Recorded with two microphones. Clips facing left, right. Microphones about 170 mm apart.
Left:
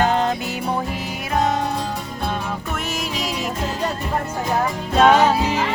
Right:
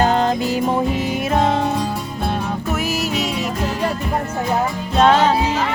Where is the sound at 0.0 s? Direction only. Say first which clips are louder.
Right 3 dB; 35° right (ahead or behind).